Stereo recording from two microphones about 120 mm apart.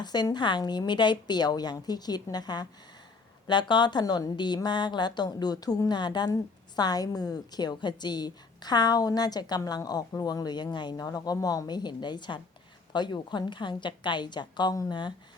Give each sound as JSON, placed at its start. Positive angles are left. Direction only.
{"t": 0.0, "sound": "a woman's voice", "side_deg": 35}